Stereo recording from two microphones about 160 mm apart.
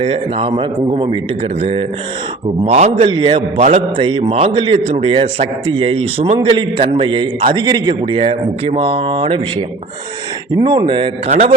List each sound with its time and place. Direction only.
0.0 s a man's voice: 35° right (ahead or behind)
11.3 s a man's voice: 45° right (ahead or behind)